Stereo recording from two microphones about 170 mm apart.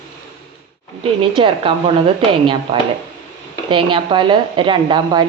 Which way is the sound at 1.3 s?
30° right (ahead or behind).